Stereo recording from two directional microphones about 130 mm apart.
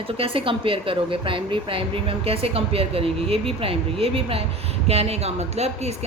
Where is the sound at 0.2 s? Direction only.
45° right (ahead or behind).